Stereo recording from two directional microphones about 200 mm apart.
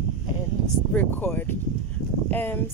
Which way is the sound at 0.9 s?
10° left (ahead or behind).